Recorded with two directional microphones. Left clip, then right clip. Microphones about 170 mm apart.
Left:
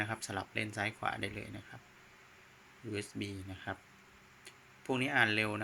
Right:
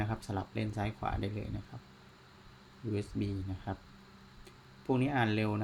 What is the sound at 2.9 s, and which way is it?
Speech, 5° right (ahead or behind).